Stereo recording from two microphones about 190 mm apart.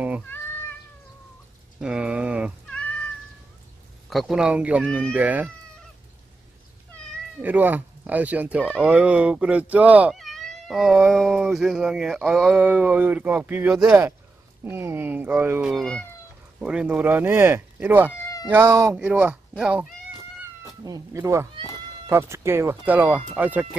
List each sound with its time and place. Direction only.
1.8 s a sound: 5° right (ahead or behind)
4.1 s speech: centre (ahead or behind)
7.4 s speech: 10° right (ahead or behind)
15.7 s speech: 5° left (ahead or behind)
18.1 s cat: 20° left (ahead or behind)
18.5 s speech: 10° right (ahead or behind)
20.8 s speech: 20° right (ahead or behind)